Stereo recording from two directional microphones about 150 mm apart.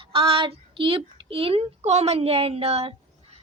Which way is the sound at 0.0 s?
35° right (ahead or behind).